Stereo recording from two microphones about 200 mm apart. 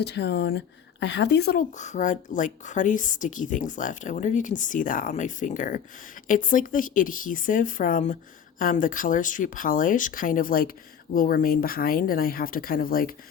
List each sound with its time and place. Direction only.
0.0 s speech: 55° left (ahead or behind)
1.8 s speech: 40° left (ahead or behind)